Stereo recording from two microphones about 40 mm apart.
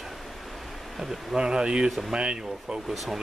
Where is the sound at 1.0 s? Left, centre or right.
Centre.